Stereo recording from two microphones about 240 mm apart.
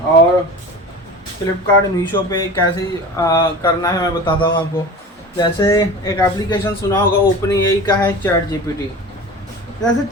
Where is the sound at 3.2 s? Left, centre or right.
Centre.